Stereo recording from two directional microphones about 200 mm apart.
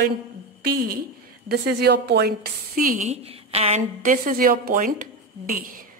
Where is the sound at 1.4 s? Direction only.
55° right (ahead or behind).